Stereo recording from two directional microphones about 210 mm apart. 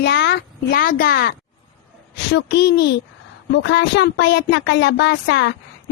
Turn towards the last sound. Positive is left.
turn(degrees=55)  # may be behind; listen again after turning